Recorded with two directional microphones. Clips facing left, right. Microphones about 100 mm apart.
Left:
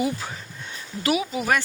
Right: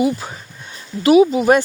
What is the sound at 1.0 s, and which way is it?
Speech, 25° right (ahead or behind).